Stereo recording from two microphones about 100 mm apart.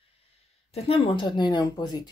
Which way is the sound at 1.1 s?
50° left (ahead or behind).